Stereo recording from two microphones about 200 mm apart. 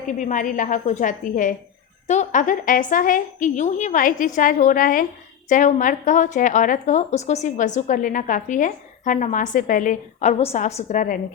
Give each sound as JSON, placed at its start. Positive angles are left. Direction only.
{"t": 0.2, "sound": "a woman's voice", "side_deg": 40}